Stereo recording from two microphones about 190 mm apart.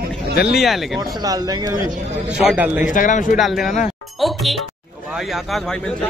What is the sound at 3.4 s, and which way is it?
A man's voice, centre (ahead or behind).